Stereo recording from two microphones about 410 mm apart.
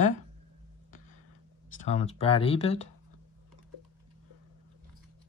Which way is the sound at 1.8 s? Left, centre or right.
Centre.